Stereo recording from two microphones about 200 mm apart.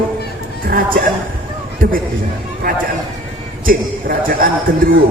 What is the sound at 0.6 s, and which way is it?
A man's voice, 45° right (ahead or behind).